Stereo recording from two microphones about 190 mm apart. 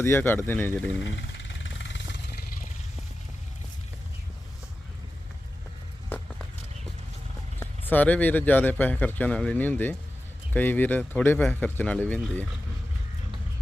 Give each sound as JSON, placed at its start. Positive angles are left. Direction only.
{"t": 0.0, "sound": "speech", "side_deg": 10}
{"t": 1.0, "sound": "vehicle", "side_deg": 75}
{"t": 7.9, "sound": "speech", "side_deg": 10}